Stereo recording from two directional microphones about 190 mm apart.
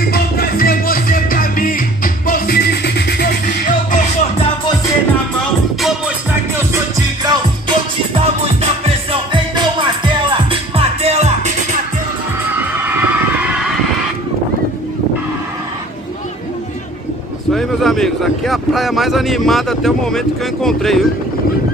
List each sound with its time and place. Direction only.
0.1 s music: 50° left (ahead or behind)
3.9 s music: 40° left (ahead or behind)
5.4 s music: centre (ahead or behind)
7.2 s music: 25° right (ahead or behind)
12.5 s a sound: 10° right (ahead or behind)
17.5 s speech: centre (ahead or behind)